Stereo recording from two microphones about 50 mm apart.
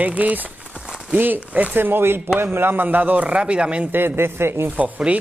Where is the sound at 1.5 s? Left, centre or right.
Right.